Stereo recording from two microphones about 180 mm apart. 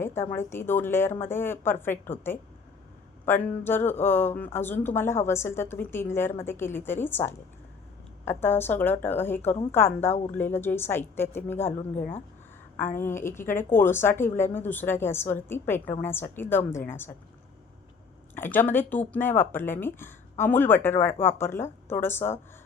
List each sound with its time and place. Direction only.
0.0 s speech: 15° left (ahead or behind)
11.8 s speech: 30° left (ahead or behind)
13.0 s speech: 15° left (ahead or behind)
18.3 s speech: 10° left (ahead or behind)